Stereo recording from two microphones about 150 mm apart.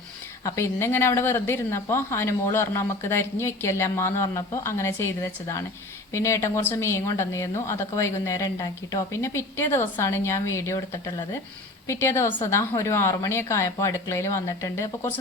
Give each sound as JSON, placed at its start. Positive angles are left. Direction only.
{"t": 0.4, "sound": "a woman's voice", "side_deg": 20}